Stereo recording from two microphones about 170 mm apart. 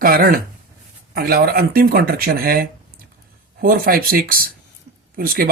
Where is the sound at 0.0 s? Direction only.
60° right (ahead or behind).